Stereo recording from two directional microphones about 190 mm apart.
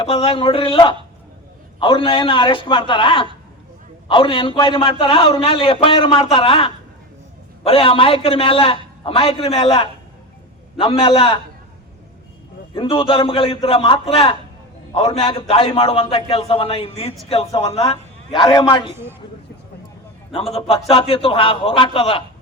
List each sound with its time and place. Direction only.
0.0 s a man's voice: 30° left (ahead or behind)
12.7 s a man's voice: 25° left (ahead or behind)
20.6 s a man's voice: 30° left (ahead or behind)